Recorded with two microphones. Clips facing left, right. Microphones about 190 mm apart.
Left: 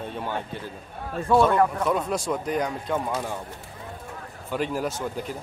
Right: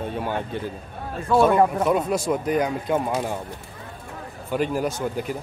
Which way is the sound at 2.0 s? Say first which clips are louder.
Right 4 dB; 5° right (ahead or behind).